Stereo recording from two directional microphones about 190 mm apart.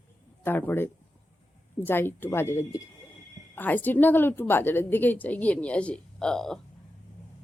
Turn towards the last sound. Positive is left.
turn(degrees=0)  # may be behind; listen again after turning